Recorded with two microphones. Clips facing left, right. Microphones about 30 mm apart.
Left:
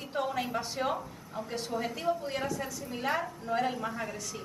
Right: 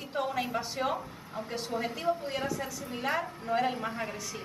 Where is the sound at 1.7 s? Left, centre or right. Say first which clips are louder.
Right 1 dB; centre.